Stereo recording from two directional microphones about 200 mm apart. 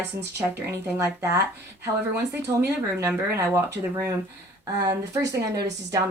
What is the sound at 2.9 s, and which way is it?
Speech, 15° right (ahead or behind).